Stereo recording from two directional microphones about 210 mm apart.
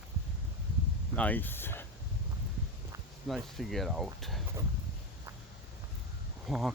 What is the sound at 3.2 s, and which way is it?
Speech, centre (ahead or behind).